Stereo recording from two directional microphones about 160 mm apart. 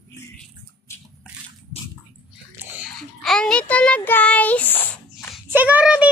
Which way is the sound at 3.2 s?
5° left (ahead or behind).